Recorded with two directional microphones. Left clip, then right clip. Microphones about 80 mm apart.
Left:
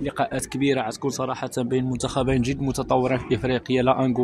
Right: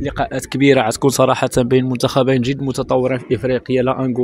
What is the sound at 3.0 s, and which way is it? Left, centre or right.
Speech, right.